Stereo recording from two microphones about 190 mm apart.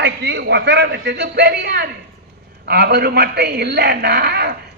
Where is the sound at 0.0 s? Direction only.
65° right (ahead or behind).